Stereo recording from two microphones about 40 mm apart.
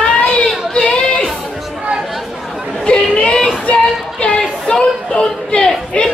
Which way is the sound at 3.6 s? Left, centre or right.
Left.